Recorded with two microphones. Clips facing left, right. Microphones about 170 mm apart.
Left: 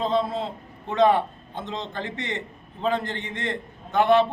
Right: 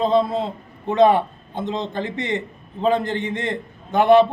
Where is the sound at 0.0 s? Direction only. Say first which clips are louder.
Right 6 dB; 15° right (ahead or behind).